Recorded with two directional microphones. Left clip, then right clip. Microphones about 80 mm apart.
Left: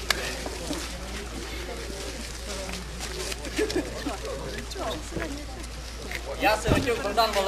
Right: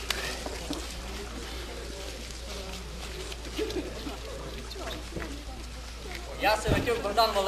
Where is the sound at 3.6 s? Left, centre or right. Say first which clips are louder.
Left 5 dB; left.